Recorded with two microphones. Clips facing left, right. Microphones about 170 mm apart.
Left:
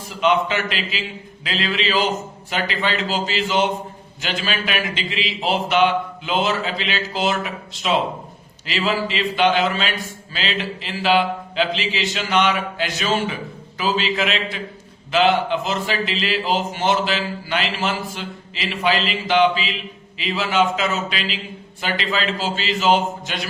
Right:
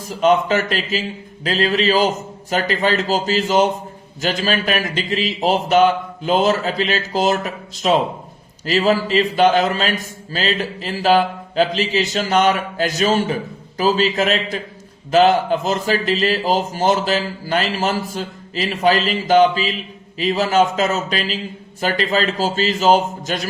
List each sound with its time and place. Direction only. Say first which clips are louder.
0.0 s a man's voice: right 3 dB; 40° right (ahead or behind)